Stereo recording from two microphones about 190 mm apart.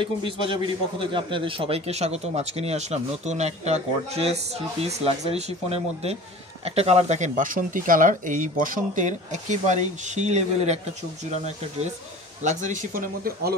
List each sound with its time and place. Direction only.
0.0 s a man's voice: 25° right (ahead or behind); by 13.6 s 50° right (ahead or behind)